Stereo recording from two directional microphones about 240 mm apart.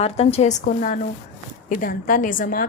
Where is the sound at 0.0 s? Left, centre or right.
Left.